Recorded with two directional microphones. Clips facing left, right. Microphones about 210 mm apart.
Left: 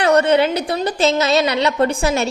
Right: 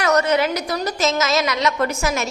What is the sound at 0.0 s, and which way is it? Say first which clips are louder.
A woman's voice: left 4 dB; 30° left (ahead or behind).